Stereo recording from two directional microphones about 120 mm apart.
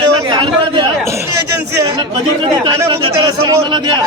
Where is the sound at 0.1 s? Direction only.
40° right (ahead or behind).